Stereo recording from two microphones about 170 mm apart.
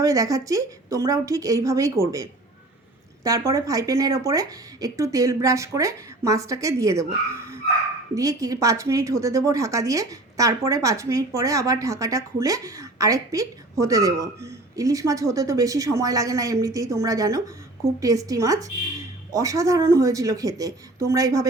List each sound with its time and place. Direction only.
0.0 s a woman's voice: 20° right (ahead or behind)
3.2 s a woman's voice: 20° right (ahead or behind)
8.1 s a woman's voice: 20° right (ahead or behind)